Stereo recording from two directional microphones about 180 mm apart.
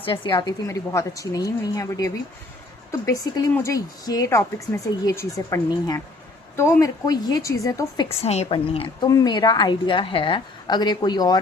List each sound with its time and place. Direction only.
0.0 s a woman's voice: 30° left (ahead or behind)
8.2 s a woman's voice: 35° left (ahead or behind)